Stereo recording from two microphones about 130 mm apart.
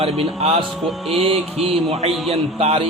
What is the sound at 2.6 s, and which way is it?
Speech, 50° right (ahead or behind).